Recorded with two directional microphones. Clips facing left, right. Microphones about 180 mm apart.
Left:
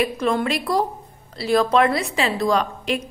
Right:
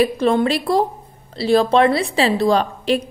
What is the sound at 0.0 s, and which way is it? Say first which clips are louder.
A woman's voice: right 5 dB; 30° right (ahead or behind).